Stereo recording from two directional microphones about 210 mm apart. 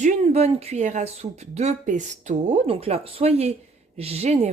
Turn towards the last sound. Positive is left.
turn(degrees=-30)  # may be behind; listen again after turning